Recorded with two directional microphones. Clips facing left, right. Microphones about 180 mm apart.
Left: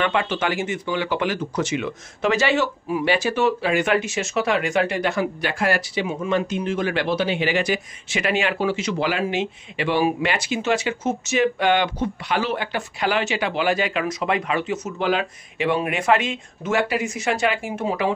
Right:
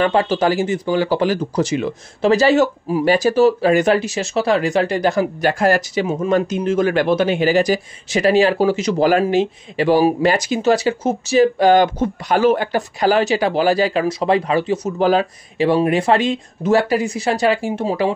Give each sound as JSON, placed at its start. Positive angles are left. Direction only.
{"t": 0.0, "sound": "speech", "side_deg": -35}